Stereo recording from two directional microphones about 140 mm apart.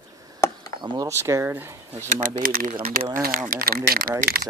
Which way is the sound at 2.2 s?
85° right.